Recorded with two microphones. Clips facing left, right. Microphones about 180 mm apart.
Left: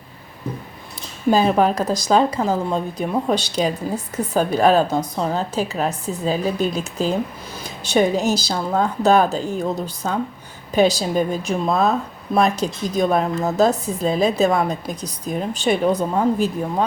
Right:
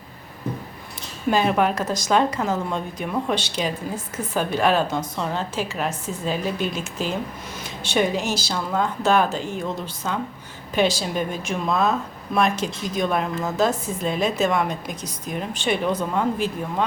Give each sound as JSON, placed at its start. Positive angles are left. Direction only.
{"t": 1.3, "sound": "speech", "side_deg": 35}